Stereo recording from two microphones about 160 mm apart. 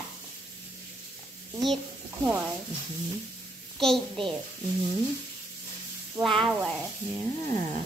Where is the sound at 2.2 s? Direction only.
10° right (ahead or behind).